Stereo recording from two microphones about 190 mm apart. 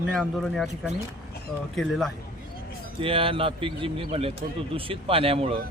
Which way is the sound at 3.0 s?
30° right (ahead or behind).